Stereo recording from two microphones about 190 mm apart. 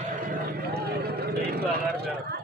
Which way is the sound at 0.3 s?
55° right (ahead or behind).